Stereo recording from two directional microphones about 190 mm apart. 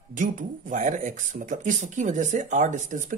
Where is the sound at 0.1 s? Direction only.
45° right (ahead or behind).